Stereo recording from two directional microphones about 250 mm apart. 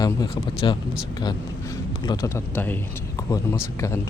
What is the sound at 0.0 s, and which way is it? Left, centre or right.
Speech, centre.